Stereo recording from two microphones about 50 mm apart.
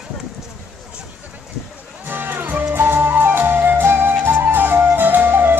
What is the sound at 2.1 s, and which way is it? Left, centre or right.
Music, right.